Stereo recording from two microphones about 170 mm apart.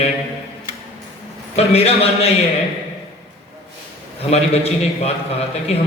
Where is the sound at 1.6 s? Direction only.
35° left (ahead or behind).